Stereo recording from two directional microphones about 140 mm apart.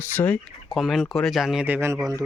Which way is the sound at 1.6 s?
15° right (ahead or behind).